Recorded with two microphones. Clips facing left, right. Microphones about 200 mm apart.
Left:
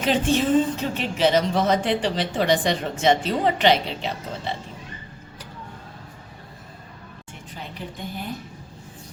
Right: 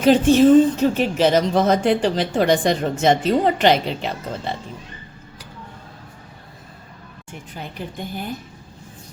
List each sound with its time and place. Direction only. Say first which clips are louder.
0.0 s a woman's voice: right 8 dB; 40° right (ahead or behind)